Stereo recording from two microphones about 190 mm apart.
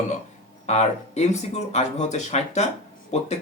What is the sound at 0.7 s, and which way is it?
Speech, 35° left (ahead or behind).